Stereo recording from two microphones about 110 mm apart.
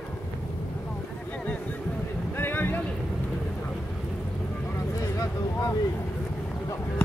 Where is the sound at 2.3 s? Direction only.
20° left (ahead or behind).